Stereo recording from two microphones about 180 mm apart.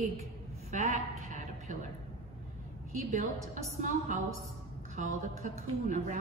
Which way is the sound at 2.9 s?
45° right (ahead or behind).